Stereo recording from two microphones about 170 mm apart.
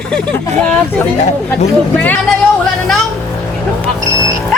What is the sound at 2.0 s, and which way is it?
Speech, 10° left (ahead or behind).